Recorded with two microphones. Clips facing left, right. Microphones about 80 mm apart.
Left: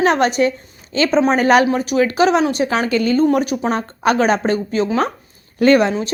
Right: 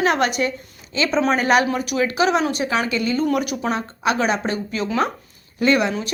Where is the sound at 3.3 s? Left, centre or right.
Left.